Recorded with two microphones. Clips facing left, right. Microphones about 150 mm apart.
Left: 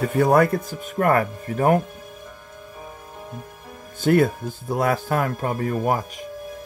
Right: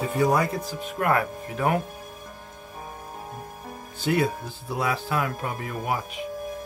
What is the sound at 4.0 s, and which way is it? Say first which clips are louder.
Speech: left 6 dB; 50° left (ahead or behind).